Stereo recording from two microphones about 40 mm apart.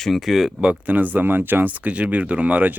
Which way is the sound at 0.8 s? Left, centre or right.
Right.